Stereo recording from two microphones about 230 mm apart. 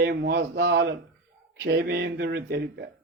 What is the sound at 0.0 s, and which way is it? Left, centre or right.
Speech, right.